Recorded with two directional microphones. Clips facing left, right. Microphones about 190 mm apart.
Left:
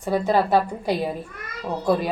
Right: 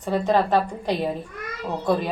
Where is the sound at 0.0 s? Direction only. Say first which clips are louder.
Even; 10° left (ahead or behind).